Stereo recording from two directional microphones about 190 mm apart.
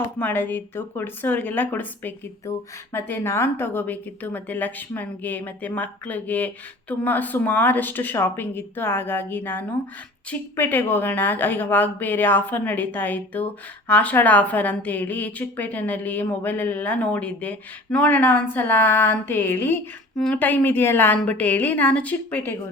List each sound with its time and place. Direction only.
0.2 s a woman's voice: 10° left (ahead or behind)